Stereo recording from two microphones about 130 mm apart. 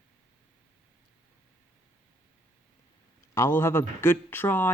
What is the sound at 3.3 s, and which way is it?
Speech, 20° left (ahead or behind).